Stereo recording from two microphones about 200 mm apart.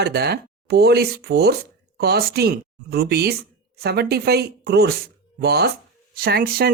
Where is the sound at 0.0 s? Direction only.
55° right (ahead or behind).